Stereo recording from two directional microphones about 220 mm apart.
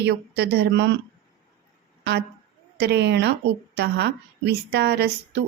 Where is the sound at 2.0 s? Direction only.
50° right (ahead or behind).